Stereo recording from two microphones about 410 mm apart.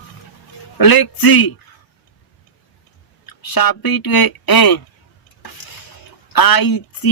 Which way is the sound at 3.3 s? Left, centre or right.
Left.